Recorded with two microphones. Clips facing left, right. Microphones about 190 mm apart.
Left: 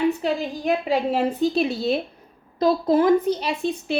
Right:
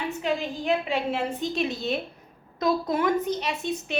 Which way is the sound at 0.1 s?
35° left (ahead or behind).